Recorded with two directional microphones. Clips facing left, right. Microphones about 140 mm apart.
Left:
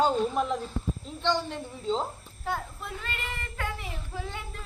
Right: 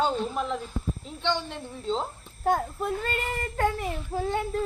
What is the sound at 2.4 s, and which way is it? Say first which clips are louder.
Speech: right 8 dB; 45° right (ahead or behind).